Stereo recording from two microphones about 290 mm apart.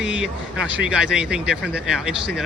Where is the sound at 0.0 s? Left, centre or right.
Centre.